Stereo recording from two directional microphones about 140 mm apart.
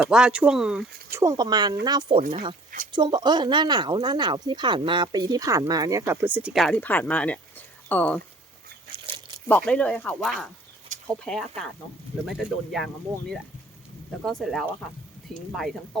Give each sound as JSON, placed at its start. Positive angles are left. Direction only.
{"t": 0.0, "sound": "speech", "side_deg": -5}
{"t": 1.1, "sound": "speech", "side_deg": -20}
{"t": 6.5, "sound": "speech", "side_deg": 0}
{"t": 6.7, "sound": "speech", "side_deg": 10}
{"t": 8.9, "sound": "crunch", "side_deg": -35}
{"t": 9.5, "sound": "speech", "side_deg": 10}